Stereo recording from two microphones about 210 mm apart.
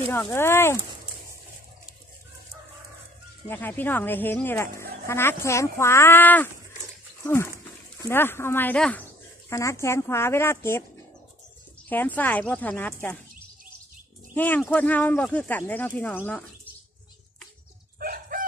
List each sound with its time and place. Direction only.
0.1 s speech: 10° left (ahead or behind)
3.4 s speech: 10° left (ahead or behind)
8.0 s speech: 10° left (ahead or behind)
11.9 s speech: 10° left (ahead or behind)
14.3 s speech: 10° left (ahead or behind)
17.9 s bird: 45° right (ahead or behind)